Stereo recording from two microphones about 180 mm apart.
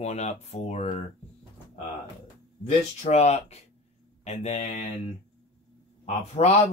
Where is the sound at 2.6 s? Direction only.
35° left (ahead or behind).